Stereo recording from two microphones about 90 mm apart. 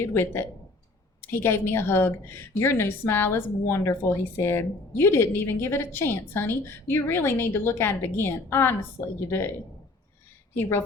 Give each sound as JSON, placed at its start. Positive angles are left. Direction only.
{"t": 0.0, "sound": "a woman's voice", "side_deg": 25}
{"t": 10.6, "sound": "a woman's voice", "side_deg": 25}